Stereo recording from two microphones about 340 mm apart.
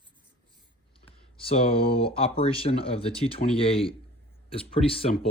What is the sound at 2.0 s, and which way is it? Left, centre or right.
Speech, centre.